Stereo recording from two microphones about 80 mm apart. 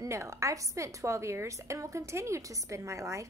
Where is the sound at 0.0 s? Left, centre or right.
Right.